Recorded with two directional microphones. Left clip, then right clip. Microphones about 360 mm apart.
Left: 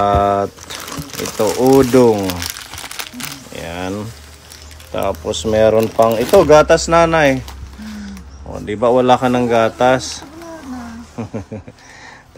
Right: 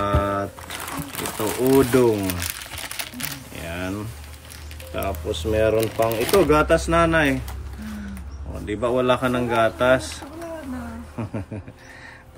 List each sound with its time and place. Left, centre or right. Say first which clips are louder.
0.0 s a sound: left 9 dB; centre
1.8 s speech: left 7 dB; centre
3.0 s wild animals: left 4 dB; centre
4.9 s speech: left 8 dB; centre
8.6 s speech: left 8 dB; centre